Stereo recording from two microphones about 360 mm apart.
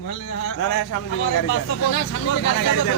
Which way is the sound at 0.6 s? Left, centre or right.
Left.